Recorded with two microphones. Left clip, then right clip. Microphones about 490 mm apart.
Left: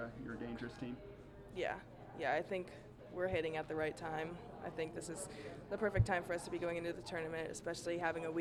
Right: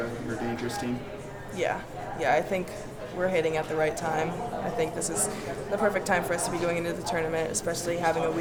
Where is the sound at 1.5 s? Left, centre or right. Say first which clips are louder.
Right 12 dB; left.